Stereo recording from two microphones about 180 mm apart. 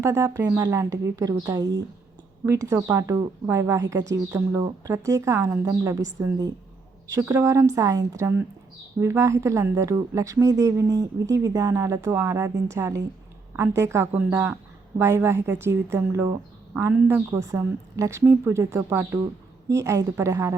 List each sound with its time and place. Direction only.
0.0 s a woman's voice: 15° right (ahead or behind)